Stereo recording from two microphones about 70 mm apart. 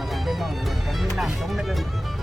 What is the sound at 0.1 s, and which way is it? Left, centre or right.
Music, centre.